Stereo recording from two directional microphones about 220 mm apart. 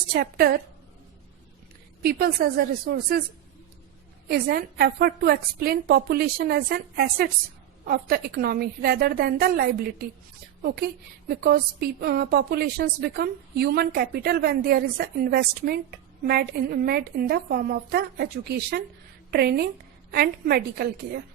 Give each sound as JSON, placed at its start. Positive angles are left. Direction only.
{"t": 0.1, "sound": "a woman's voice", "side_deg": -45}
{"t": 2.0, "sound": "a woman's voice", "side_deg": -45}
{"t": 4.3, "sound": "a woman's voice", "side_deg": -45}